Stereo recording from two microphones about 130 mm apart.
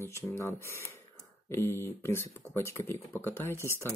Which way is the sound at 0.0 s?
20° left (ahead or behind).